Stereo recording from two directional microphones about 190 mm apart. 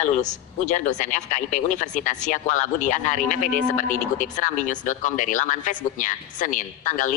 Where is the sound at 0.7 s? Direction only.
40° left (ahead or behind).